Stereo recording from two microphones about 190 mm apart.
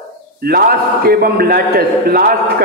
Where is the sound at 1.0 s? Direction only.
55° right (ahead or behind).